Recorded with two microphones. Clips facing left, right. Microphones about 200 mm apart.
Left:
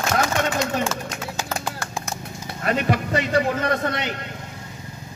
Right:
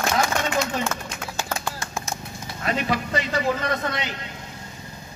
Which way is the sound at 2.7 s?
55° left (ahead or behind).